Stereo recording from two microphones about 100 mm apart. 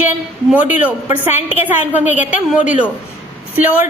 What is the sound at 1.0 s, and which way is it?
A woman's voice, 20° right (ahead or behind).